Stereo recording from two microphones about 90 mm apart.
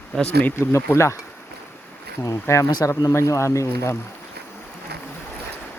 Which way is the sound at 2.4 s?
35° left (ahead or behind).